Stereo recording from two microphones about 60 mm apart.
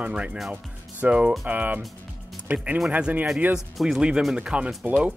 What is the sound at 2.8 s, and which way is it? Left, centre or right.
Speech, right.